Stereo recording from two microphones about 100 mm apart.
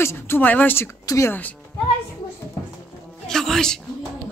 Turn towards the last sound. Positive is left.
turn(degrees=5)  # may be behind; listen again after turning